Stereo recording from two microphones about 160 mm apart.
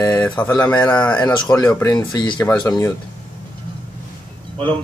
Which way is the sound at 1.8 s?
20° left (ahead or behind).